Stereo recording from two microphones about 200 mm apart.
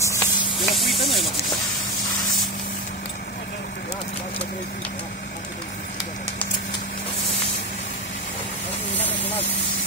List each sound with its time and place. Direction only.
0.0 s insect: 15° left (ahead or behind)
0.6 s snake: centre (ahead or behind)
8.9 s a sound: 10° left (ahead or behind)